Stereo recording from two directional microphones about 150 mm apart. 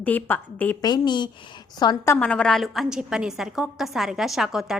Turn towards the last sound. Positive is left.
turn(degrees=0)  # may be behind; listen again after turning